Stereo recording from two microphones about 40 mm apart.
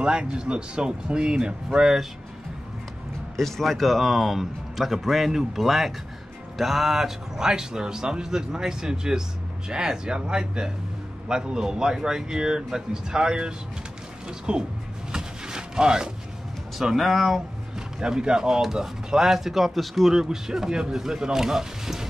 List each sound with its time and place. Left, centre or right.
0.0 s speech: right
3.3 s speech: centre; by 14.6 s right
15.1 s a sound: centre
16.7 s speech: centre
17.7 s speech: centre